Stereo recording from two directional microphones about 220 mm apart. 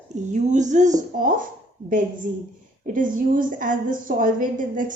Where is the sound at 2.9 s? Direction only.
35° right (ahead or behind).